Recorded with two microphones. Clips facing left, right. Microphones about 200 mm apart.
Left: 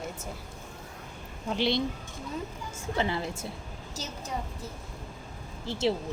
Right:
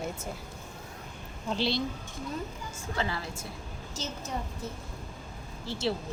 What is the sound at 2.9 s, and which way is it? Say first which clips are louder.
Speech: left 4 dB; 20° left (ahead or behind).